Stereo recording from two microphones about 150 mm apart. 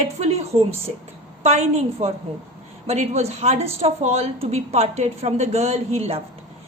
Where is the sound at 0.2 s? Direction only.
45° right (ahead or behind).